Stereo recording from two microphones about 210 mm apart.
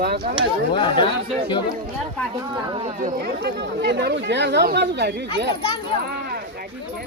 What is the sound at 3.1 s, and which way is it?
Speech, 50° right (ahead or behind).